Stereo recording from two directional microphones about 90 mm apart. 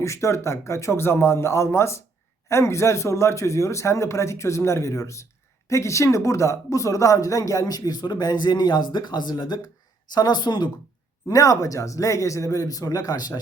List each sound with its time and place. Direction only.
0.0 s speech: 35° left (ahead or behind); by 10.7 s 55° left (ahead or behind)
11.3 s speech: 40° left (ahead or behind)